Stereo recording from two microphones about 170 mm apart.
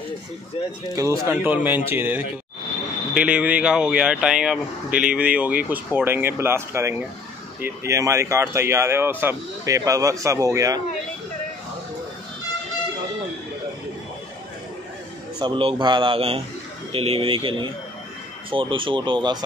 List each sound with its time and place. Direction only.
0.9 s speech: 20° right (ahead or behind)
15.3 s a man's voice: 25° right (ahead or behind)